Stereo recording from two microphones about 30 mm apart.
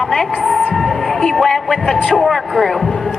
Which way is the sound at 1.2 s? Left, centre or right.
Centre.